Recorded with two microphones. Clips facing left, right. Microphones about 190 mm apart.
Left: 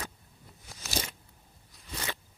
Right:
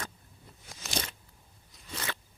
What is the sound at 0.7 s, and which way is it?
Crunch, 5° left (ahead or behind).